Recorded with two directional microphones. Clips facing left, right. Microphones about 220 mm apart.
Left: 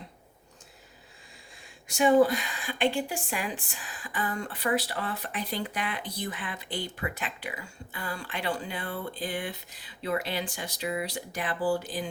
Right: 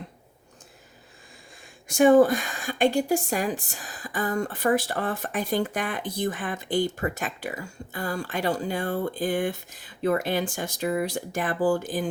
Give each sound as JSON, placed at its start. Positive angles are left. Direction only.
{"t": 1.9, "sound": "a woman's voice", "side_deg": -50}